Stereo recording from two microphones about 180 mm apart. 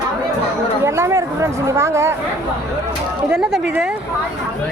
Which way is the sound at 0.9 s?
15° right (ahead or behind).